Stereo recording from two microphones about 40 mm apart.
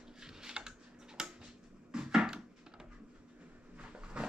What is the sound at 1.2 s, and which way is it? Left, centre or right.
Tick-tock, centre.